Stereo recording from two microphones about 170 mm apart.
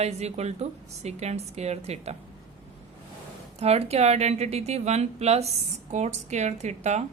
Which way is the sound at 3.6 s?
40° right (ahead or behind).